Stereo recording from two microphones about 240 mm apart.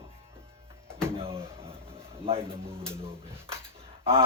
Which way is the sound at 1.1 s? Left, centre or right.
Right.